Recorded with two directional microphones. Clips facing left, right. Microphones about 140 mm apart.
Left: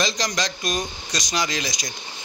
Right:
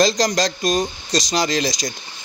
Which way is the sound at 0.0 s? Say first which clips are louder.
Right 8 dB; 35° right (ahead or behind).